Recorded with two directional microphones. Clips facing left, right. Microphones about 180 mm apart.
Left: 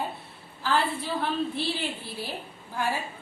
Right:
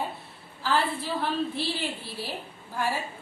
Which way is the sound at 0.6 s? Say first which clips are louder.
Even; centre (ahead or behind).